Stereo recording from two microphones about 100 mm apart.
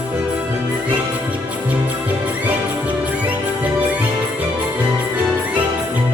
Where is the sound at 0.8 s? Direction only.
15° right (ahead or behind).